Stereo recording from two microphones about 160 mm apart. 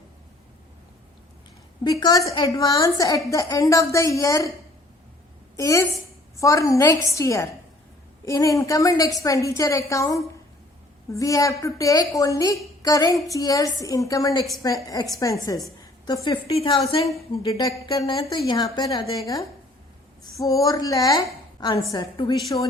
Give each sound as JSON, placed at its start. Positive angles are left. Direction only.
{"t": 1.8, "sound": "a woman's voice", "side_deg": 25}
{"t": 5.5, "sound": "a woman's voice", "side_deg": 20}
{"t": 17.4, "sound": "a woman's voice", "side_deg": 20}